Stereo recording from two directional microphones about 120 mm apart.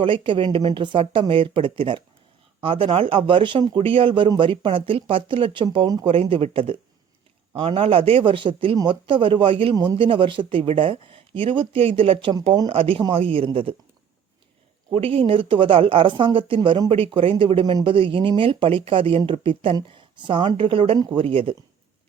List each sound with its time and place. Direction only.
0.0 s speech: 45° right (ahead or behind)
14.9 s speech: 50° right (ahead or behind)
16.6 s speech: 35° right (ahead or behind)
17.2 s speech: 45° right (ahead or behind)